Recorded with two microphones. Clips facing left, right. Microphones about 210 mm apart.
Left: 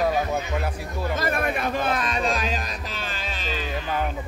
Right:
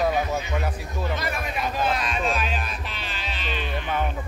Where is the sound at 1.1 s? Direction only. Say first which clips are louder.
Left 4 dB; 50° left (ahead or behind).